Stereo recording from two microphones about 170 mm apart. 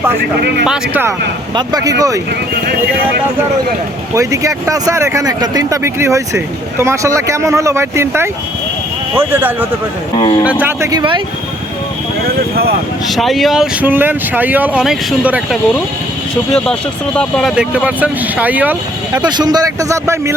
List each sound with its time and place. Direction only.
0.6 s speech: 5° right (ahead or behind)
1.5 s a man's voice: 20° right (ahead or behind)
4.1 s speech: 20° right (ahead or behind)
10.2 s speech: 30° left (ahead or behind)
10.4 s speech: 10° right (ahead or behind)
13.1 s speech: centre (ahead or behind)
13.8 s speech: 10° right (ahead or behind)
16.5 s speech: 5° left (ahead or behind)
17.5 s speech: 5° right (ahead or behind)
19.2 s a man's voice: 25° right (ahead or behind)